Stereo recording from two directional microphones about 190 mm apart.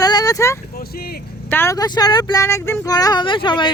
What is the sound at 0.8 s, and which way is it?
Speech, 55° left (ahead or behind).